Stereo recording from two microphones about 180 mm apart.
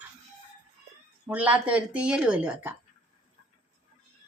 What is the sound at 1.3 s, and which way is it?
Speech, 10° right (ahead or behind).